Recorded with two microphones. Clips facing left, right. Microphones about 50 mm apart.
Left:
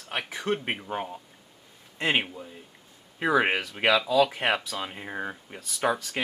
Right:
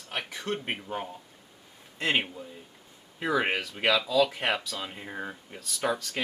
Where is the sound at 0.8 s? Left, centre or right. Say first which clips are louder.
Left 3 dB; centre.